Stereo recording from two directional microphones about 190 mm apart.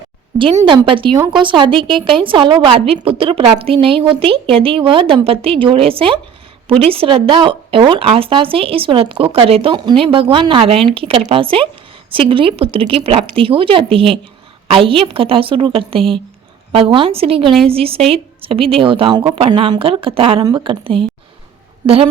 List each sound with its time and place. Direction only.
0.7 s speech: 25° right (ahead or behind)
17.4 s a woman's voice: centre (ahead or behind)
17.7 s speech: 30° right (ahead or behind)